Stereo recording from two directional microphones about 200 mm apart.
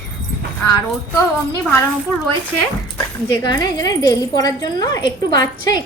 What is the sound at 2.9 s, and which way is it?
Speech, 20° left (ahead or behind).